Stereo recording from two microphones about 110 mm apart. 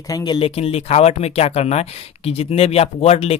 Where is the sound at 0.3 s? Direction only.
55° left (ahead or behind).